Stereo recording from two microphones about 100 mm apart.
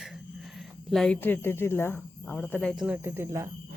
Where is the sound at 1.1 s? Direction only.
20° left (ahead or behind).